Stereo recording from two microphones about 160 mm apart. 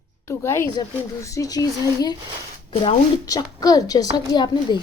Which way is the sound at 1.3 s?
20° left (ahead or behind).